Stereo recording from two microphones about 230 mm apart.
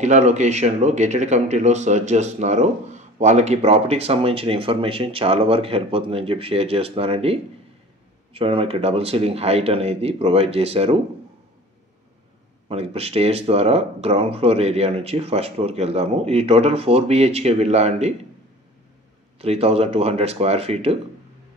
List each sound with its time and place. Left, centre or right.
0.0 s speech: right
12.6 s speech: right
19.3 s speech: right